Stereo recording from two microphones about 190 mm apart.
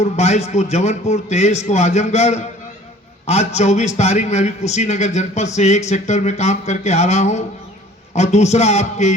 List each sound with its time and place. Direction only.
0.0 s a man's voice: 35° left (ahead or behind)